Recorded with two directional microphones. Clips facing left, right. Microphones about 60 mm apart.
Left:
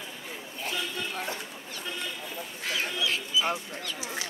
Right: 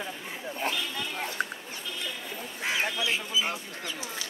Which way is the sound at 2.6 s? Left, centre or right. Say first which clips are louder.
Right 2 dB; right.